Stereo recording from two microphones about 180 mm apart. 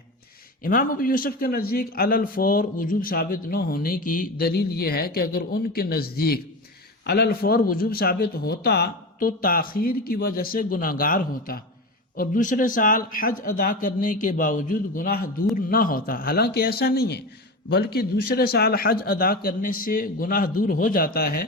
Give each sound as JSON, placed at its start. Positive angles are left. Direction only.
{"t": 0.6, "sound": "a man's voice", "side_deg": 50}